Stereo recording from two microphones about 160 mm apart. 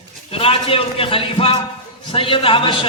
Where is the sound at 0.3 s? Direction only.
35° left (ahead or behind).